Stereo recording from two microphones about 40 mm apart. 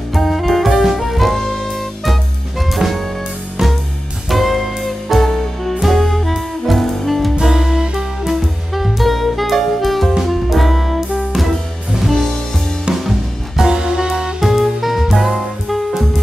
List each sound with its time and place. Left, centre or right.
0.1 s music: centre
2.7 s music: centre
4.3 s music: centre
7.4 s music: centre
8.3 s music: centre
13.7 s music: centre
14.4 s music: centre